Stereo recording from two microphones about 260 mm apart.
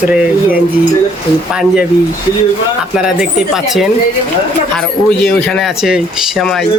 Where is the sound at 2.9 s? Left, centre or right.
Centre.